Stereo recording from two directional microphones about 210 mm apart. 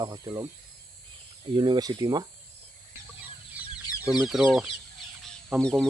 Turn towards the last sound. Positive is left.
turn(degrees=-5)  # may be behind; listen again after turning